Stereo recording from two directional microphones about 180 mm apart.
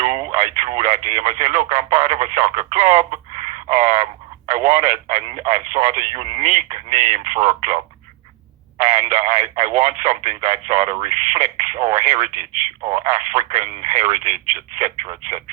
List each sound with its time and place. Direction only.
0.0 s speech: 40° right (ahead or behind)
8.8 s speech: 40° right (ahead or behind)